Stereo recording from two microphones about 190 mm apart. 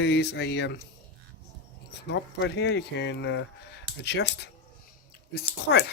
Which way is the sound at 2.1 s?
65° left (ahead or behind).